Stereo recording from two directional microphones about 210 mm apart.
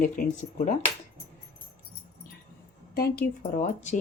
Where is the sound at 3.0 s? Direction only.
45° left (ahead or behind).